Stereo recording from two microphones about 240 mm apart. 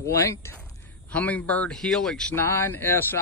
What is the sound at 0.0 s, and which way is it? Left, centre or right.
Speech, centre.